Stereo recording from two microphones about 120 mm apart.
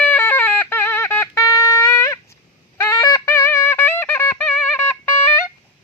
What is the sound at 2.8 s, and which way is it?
Music, 25° left (ahead or behind).